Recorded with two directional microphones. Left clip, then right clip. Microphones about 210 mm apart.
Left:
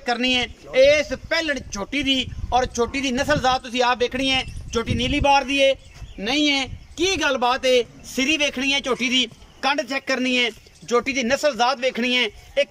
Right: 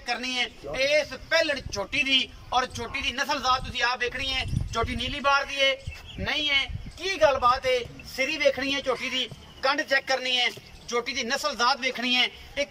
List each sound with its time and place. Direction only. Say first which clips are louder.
0.0 s a man's voice: left 7 dB; 45° left (ahead or behind)